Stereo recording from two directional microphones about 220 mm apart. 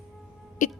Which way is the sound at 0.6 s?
35° left (ahead or behind).